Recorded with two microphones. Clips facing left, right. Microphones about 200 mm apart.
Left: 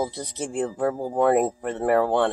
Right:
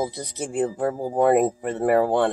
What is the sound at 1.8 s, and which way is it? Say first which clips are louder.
Speech: right 1 dB; 45° right (ahead or behind).